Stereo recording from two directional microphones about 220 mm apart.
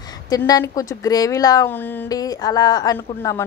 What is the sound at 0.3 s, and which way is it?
Speech, 15° left (ahead or behind).